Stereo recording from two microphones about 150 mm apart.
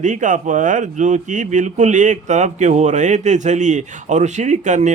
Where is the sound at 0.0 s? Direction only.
55° right (ahead or behind).